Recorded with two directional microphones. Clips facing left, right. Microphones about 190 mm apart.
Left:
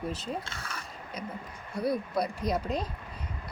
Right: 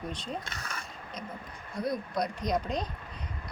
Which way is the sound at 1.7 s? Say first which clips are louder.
Left 3 dB; 10° left (ahead or behind).